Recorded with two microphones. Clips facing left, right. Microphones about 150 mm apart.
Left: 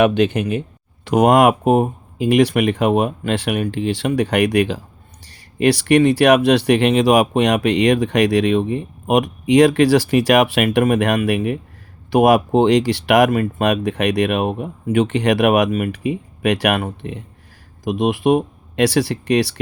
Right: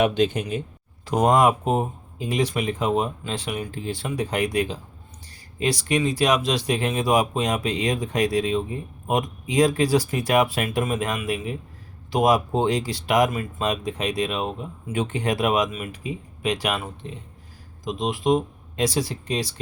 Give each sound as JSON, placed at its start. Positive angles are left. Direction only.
{"t": 0.0, "sound": "speech", "side_deg": 65}